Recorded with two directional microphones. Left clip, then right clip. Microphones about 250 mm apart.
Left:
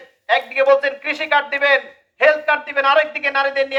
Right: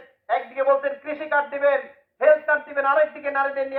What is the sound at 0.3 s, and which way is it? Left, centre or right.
A man's voice, left.